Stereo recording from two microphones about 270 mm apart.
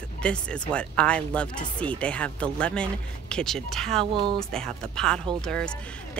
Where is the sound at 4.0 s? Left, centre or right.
Centre.